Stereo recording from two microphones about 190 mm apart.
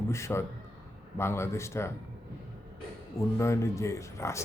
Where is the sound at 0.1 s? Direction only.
15° left (ahead or behind).